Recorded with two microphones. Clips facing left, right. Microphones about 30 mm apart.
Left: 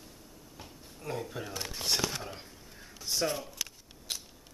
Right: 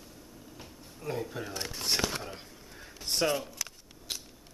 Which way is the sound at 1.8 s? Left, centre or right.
Centre.